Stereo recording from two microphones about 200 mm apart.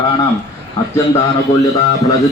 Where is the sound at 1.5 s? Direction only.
35° left (ahead or behind).